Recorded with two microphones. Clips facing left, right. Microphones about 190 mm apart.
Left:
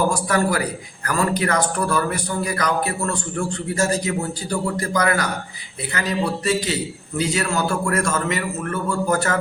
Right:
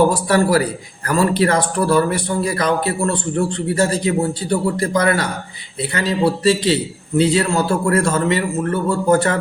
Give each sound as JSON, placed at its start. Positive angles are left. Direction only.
{"t": 0.3, "sound": "a man's voice", "side_deg": -30}